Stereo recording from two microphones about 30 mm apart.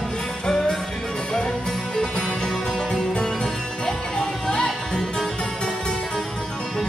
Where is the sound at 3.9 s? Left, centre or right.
Left.